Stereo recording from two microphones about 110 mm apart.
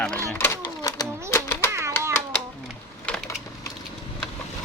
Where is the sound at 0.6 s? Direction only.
35° left (ahead or behind).